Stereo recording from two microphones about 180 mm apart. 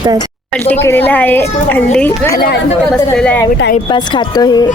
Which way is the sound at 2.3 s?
60° left (ahead or behind).